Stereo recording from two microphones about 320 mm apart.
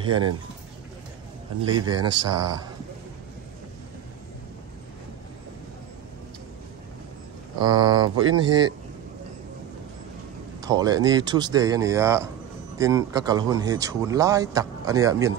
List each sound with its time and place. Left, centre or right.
0.0 s speech: centre
1.7 s speech: centre
7.5 s speech: centre
10.6 s speech: centre